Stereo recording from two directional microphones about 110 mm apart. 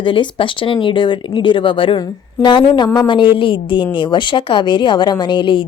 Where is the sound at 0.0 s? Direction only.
50° left (ahead or behind).